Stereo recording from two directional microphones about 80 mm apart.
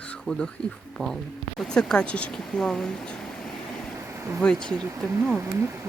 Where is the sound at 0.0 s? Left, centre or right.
Centre.